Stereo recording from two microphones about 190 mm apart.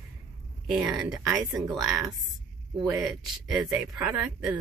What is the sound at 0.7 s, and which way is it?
Speech, 5° right (ahead or behind).